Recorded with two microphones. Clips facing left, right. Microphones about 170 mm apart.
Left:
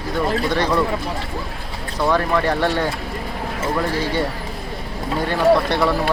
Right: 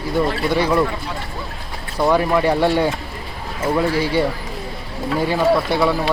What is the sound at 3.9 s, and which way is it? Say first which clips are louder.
Speech: right 3 dB; 10° right (ahead or behind).